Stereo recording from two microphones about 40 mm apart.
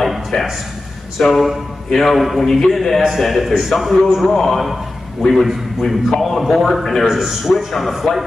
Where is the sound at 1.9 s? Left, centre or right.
Centre.